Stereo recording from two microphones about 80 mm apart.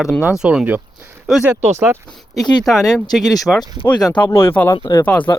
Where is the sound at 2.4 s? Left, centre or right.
Left.